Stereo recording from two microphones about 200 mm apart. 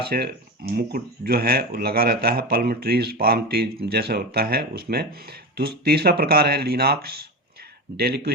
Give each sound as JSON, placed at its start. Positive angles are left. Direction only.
{"t": 0.1, "sound": "speech", "side_deg": -45}